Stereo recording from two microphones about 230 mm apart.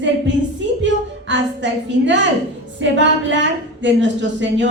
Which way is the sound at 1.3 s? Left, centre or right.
Right.